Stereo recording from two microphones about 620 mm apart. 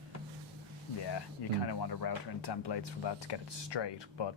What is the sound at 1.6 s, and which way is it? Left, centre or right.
Speech, left.